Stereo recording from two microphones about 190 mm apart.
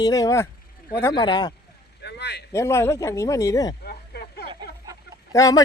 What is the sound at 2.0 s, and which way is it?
Speech, 60° left (ahead or behind).